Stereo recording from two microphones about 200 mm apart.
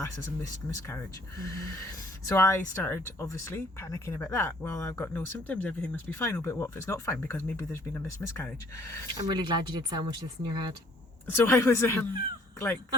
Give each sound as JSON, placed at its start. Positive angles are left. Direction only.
{"t": 0.0, "sound": "speech", "side_deg": 15}
{"t": 9.2, "sound": "speech", "side_deg": -20}
{"t": 11.3, "sound": "speech", "side_deg": 10}